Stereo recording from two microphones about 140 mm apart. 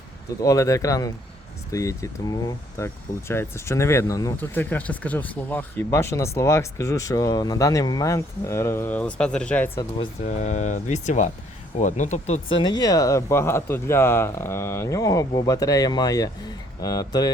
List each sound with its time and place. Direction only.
0.4 s speech: 25° left (ahead or behind)
4.4 s speech: 15° left (ahead or behind)
10.2 s speech: 60° left (ahead or behind)
12.5 s speech: 30° left (ahead or behind)